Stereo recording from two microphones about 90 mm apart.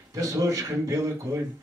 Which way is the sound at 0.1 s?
40° right (ahead or behind).